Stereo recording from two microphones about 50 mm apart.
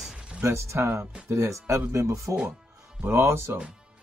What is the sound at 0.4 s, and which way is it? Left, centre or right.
Speech, right.